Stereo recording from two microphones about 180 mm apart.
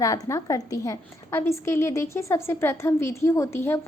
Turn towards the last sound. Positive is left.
turn(degrees=15)  # may be behind; listen again after turning